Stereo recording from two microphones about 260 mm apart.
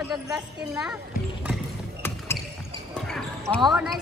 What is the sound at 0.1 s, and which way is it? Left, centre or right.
Speech, centre.